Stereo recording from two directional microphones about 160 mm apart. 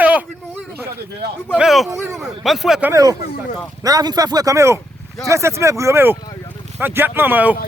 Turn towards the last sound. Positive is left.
turn(degrees=-10)  # may be behind; listen again after turning